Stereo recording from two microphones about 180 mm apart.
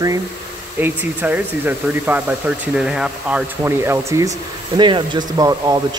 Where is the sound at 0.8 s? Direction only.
10° right (ahead or behind).